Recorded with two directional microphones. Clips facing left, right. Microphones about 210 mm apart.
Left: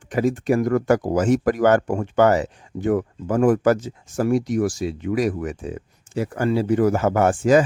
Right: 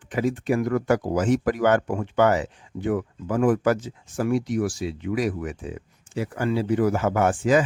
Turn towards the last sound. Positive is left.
turn(degrees=45)  # may be behind; listen again after turning